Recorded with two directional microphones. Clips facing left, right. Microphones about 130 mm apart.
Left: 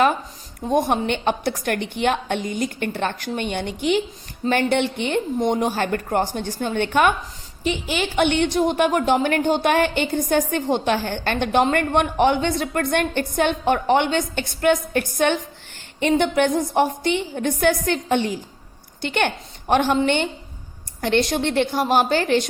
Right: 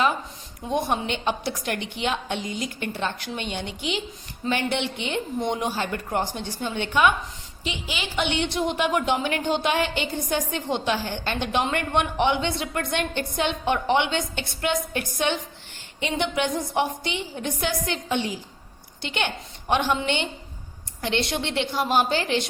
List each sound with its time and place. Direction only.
0.7 s a woman's voice: 50° left (ahead or behind)